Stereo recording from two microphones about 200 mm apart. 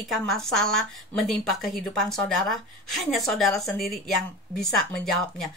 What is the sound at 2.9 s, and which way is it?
Speech, centre (ahead or behind).